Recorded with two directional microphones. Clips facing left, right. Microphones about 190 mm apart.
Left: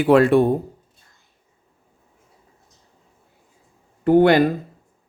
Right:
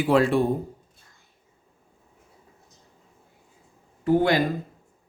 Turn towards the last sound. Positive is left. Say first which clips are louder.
# left 7 dB
turn(degrees=65)  # may be behind; listen again after turning